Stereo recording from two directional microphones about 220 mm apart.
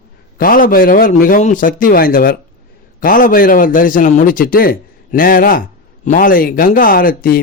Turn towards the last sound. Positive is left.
turn(degrees=40)  # may be behind; listen again after turning